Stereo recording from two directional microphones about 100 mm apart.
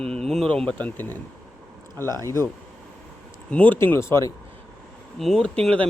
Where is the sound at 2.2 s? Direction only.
25° left (ahead or behind).